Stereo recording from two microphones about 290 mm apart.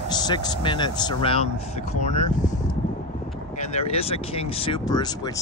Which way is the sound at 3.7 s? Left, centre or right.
Left.